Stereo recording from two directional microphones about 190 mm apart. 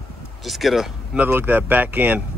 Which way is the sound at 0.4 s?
Centre (ahead or behind).